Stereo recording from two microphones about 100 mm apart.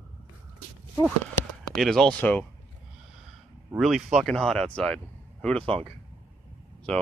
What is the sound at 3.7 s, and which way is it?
Speech, 5° right (ahead or behind).